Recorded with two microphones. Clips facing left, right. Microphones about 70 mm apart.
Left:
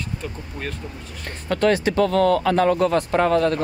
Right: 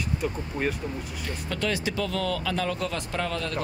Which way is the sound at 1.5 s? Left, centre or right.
Left.